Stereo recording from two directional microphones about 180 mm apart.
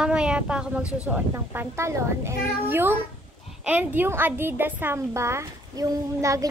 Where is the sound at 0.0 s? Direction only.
5° right (ahead or behind).